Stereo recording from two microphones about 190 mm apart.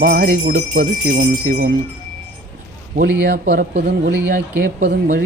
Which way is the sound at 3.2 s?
60° right (ahead or behind).